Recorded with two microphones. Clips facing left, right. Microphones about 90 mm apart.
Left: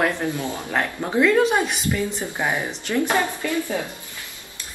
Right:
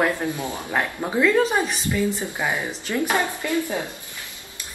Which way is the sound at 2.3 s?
20° left (ahead or behind).